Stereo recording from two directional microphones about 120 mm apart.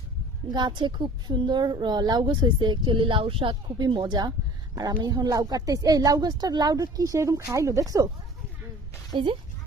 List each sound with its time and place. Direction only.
0.5 s a woman's voice: 40° right (ahead or behind)
9.1 s speech: 45° right (ahead or behind)